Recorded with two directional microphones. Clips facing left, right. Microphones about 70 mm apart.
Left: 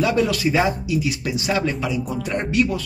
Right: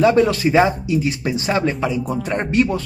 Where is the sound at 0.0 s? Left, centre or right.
Right.